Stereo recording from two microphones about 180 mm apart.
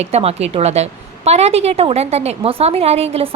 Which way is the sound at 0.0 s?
35° right (ahead or behind).